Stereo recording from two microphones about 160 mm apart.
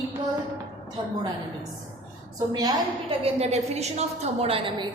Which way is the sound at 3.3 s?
40° right (ahead or behind).